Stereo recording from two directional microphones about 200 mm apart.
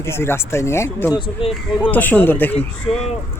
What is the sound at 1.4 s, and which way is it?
Speech, 30° left (ahead or behind).